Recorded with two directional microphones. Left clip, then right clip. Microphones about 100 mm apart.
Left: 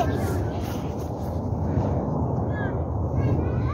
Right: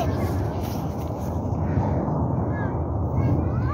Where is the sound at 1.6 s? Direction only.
10° left (ahead or behind).